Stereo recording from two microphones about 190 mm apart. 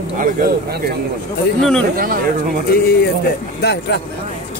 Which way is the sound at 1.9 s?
50° right (ahead or behind).